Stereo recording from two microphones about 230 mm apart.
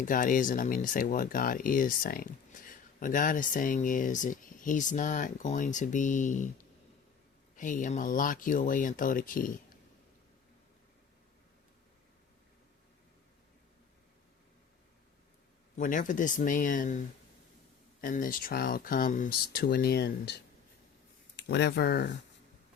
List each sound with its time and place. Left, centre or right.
0.0 s speech: left
7.5 s speech: left
15.8 s speech: left
18.0 s speech: left